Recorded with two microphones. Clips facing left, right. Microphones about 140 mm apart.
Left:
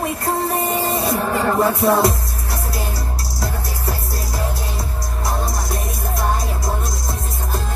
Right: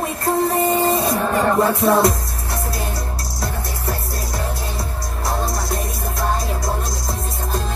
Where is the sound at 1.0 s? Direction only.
30° left (ahead or behind).